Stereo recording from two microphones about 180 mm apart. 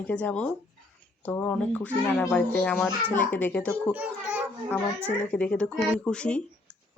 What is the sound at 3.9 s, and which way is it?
Speech, 5° right (ahead or behind).